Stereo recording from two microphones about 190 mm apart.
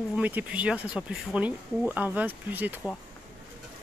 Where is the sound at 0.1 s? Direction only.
10° right (ahead or behind).